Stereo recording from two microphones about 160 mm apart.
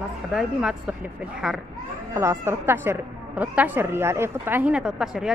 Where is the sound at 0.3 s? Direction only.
5° right (ahead or behind).